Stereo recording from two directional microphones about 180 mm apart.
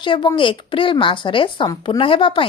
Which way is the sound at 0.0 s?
25° left (ahead or behind).